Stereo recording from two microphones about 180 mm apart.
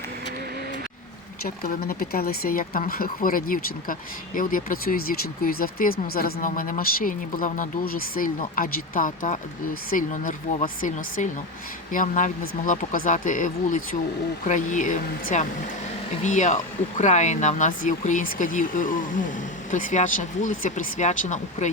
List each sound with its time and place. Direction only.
1.5 s speech: 55° left (ahead or behind)